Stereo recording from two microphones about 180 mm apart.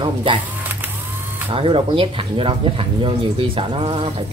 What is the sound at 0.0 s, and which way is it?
Speech, 25° right (ahead or behind).